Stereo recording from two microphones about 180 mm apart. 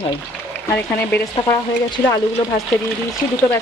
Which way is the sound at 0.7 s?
15° left (ahead or behind).